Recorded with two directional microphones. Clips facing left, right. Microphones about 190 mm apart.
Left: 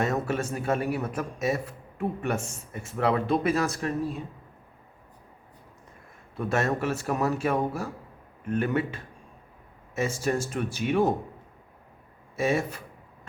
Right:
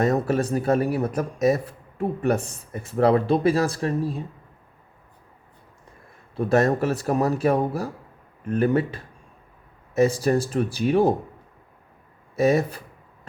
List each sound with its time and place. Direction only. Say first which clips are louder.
0.0 s speech: right 6 dB; 35° right (ahead or behind)
6.3 s speech: right 7 dB; 35° right (ahead or behind)
12.4 s speech: right 6 dB; 40° right (ahead or behind)